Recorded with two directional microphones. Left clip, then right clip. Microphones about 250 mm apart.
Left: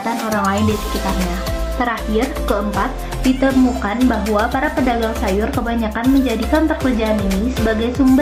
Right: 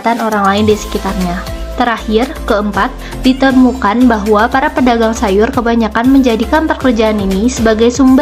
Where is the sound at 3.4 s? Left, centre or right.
Right.